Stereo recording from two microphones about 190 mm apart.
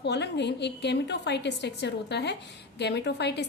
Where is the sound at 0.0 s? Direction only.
65° left (ahead or behind).